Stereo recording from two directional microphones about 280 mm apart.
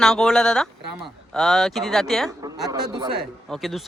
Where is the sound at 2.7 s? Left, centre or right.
Centre.